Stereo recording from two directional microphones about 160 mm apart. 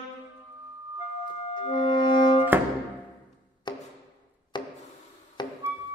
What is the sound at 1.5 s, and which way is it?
Music, 30° left (ahead or behind).